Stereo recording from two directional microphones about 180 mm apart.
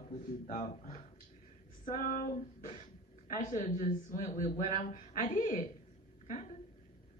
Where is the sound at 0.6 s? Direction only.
40° left (ahead or behind).